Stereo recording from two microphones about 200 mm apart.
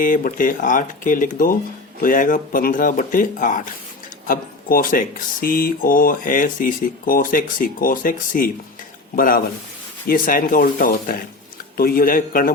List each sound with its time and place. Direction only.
0.0 s speech: 45° left (ahead or behind)